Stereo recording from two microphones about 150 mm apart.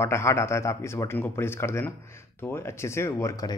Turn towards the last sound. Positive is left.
turn(degrees=20)  # may be behind; listen again after turning